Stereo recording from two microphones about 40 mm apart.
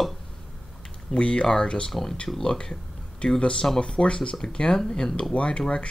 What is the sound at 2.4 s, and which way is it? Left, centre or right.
Speech, centre.